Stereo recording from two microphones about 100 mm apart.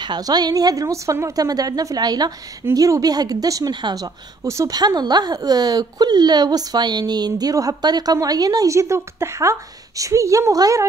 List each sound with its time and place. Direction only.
0.0 s speech: 45° right (ahead or behind)